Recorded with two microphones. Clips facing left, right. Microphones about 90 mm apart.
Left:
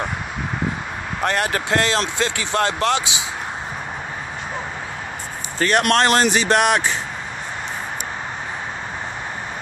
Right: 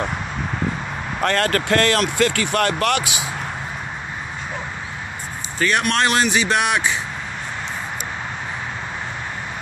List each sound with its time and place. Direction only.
1.2 s speech: 15° left (ahead or behind)
5.6 s speech: 40° left (ahead or behind)